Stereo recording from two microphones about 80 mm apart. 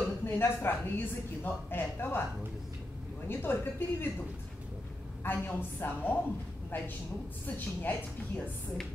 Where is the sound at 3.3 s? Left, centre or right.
Left.